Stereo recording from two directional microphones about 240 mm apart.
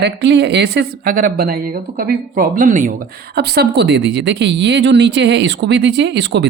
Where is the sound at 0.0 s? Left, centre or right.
Right.